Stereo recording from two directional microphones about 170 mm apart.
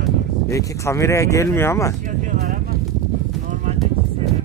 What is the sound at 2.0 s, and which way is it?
Vehicle, 50° right (ahead or behind).